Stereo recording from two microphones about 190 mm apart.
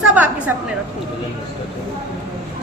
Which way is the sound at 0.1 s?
5° right (ahead or behind).